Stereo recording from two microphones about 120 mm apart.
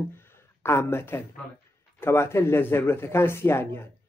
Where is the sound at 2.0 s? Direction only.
20° left (ahead or behind).